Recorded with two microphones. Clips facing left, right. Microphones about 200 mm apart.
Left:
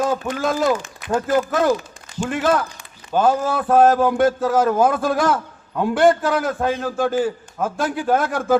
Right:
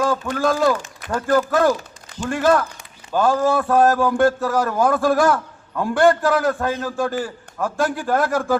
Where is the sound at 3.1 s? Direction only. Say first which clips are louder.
Right 1 dB; 20° left (ahead or behind).